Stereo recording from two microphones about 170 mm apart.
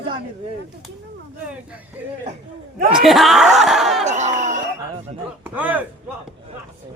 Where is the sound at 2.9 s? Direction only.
Centre (ahead or behind).